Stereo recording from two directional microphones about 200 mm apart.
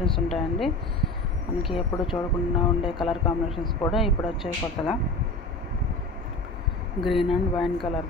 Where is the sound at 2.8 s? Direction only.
25° left (ahead or behind).